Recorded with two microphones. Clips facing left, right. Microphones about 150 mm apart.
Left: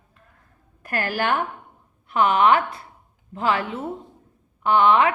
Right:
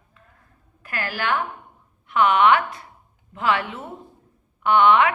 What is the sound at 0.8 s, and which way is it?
Speech, 45° left (ahead or behind).